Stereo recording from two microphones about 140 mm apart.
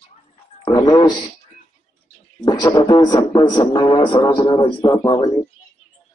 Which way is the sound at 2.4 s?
30° left (ahead or behind).